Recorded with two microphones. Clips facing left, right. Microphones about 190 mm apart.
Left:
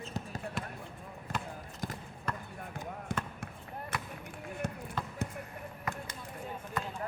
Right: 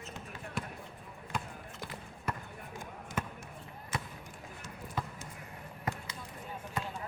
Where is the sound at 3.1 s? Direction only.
60° left (ahead or behind).